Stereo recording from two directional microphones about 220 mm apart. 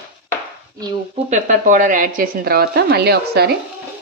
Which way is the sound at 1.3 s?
35° right (ahead or behind).